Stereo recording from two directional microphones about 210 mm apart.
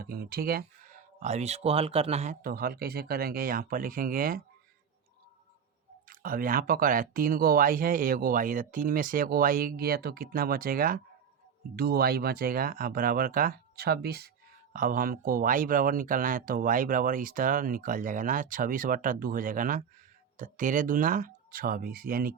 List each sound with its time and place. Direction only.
0.0 s speech: 45° right (ahead or behind)
1.2 s speech: 30° right (ahead or behind)
6.1 s speech: 45° right (ahead or behind)